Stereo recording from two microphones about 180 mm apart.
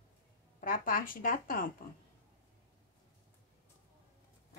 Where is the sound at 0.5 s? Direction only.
50° left (ahead or behind).